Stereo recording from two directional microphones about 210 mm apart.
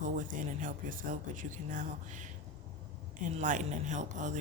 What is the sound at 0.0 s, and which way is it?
Speech, 40° right (ahead or behind).